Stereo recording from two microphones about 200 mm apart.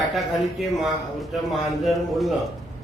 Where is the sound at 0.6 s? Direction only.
Centre (ahead or behind).